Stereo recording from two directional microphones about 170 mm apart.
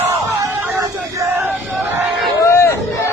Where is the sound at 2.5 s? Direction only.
15° left (ahead or behind).